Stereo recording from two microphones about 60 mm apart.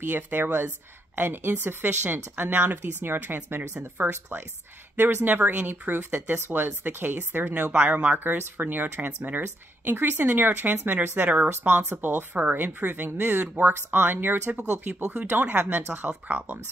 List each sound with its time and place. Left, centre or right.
0.0 s speech: right
14.6 s speech: centre